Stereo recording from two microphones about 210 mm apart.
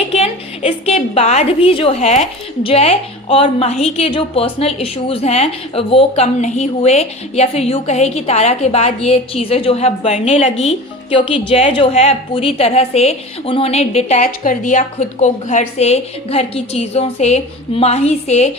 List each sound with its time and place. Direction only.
0.1 s a woman's voice: 30° left (ahead or behind)